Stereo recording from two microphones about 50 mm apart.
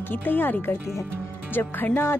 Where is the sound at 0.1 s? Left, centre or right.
Left.